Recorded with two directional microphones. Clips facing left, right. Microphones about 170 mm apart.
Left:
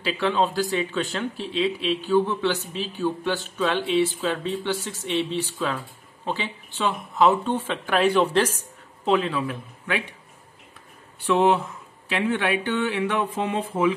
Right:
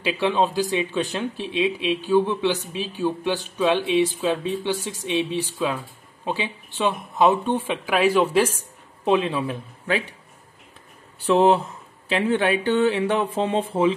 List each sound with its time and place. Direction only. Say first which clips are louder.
0.0 s speech: right 2 dB; 15° right (ahead or behind)
7.9 s speech: right 1 dB; centre (ahead or behind)
9.0 s speech: right 2 dB; 20° right (ahead or behind)
11.2 s speech: right 3 dB; 35° right (ahead or behind)